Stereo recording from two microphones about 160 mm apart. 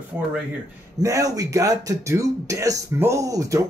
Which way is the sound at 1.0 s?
20° right (ahead or behind).